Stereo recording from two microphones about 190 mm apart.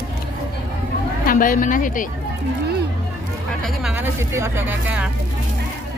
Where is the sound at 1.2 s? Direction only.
45° left (ahead or behind).